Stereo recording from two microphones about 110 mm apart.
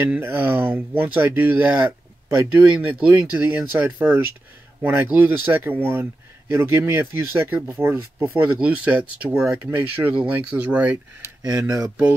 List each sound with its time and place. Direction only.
0.0 s speech: 20° right (ahead or behind)